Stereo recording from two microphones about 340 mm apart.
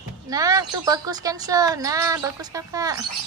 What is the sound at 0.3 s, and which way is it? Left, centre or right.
Speech, centre.